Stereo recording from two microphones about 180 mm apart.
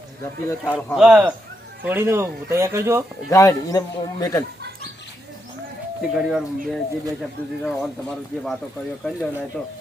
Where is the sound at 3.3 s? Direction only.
20° left (ahead or behind).